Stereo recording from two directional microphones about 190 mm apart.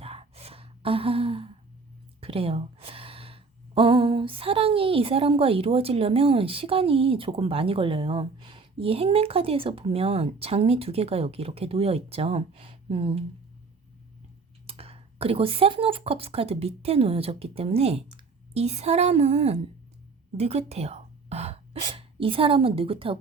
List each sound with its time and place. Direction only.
0.0 s gasp: 30° right (ahead or behind)
2.2 s speech: 30° right (ahead or behind)
14.7 s speech: 30° right (ahead or behind)